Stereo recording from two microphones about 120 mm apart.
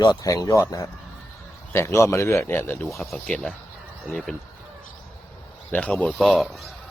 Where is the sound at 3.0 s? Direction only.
Centre (ahead or behind).